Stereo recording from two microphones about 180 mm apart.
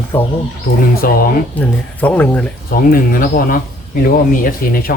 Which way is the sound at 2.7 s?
50° left (ahead or behind).